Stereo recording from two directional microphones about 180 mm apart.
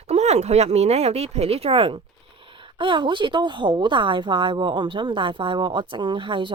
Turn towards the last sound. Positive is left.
turn(degrees=-25)  # may be behind; listen again after turning